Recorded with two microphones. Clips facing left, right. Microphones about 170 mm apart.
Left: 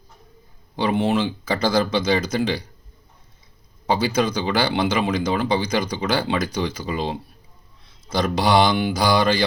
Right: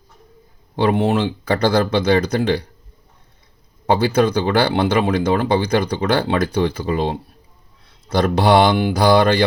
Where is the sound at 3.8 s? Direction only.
60° right (ahead or behind).